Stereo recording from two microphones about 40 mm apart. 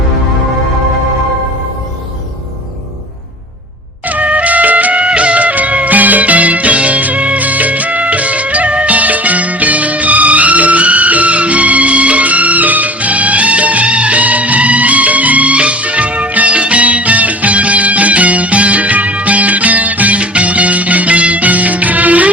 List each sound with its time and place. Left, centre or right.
4.0 s music: right